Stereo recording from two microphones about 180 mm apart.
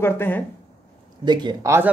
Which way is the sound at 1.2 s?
25° right (ahead or behind).